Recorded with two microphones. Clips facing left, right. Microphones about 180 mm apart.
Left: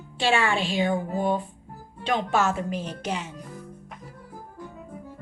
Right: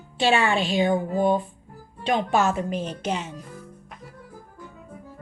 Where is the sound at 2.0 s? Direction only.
15° right (ahead or behind).